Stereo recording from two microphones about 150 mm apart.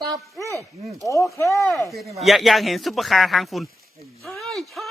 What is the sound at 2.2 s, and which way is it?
Chopping, centre (ahead or behind).